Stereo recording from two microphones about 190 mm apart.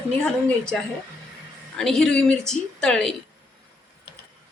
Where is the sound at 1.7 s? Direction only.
5° left (ahead or behind).